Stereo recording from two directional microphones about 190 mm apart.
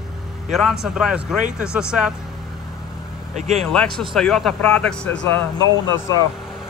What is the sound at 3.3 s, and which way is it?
Speech, 40° right (ahead or behind).